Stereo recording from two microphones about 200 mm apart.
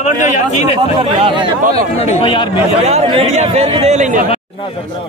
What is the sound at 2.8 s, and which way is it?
Speech, 30° right (ahead or behind).